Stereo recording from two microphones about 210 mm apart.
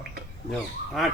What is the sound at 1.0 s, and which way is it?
Speech, centre (ahead or behind).